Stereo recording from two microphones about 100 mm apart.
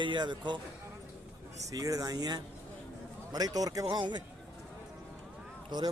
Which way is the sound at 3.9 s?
50° right (ahead or behind).